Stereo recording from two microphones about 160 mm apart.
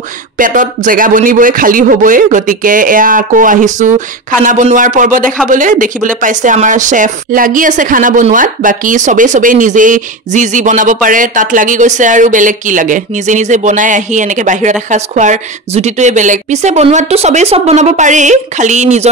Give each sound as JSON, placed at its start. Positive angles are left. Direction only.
{"t": 0.4, "sound": "a man's voice", "side_deg": -60}